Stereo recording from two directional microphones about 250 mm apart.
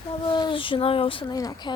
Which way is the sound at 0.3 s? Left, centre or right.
Centre.